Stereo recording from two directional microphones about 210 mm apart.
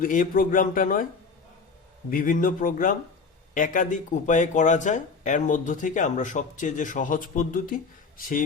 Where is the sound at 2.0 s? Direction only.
40° left (ahead or behind).